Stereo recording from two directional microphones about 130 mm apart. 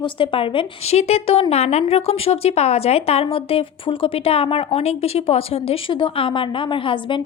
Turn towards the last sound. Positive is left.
turn(degrees=40)  # may be behind; listen again after turning